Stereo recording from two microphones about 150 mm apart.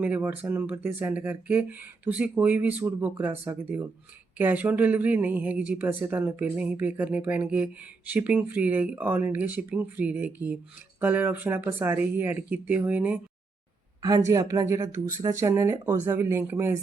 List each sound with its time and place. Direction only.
0.0 s a woman's voice: 10° right (ahead or behind)
14.3 s a woman's voice: 20° right (ahead or behind)